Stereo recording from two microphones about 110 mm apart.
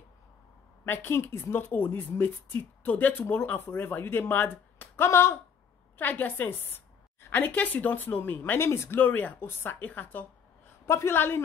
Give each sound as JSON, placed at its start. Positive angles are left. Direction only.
{"t": 1.0, "sound": "a woman's voice", "side_deg": 20}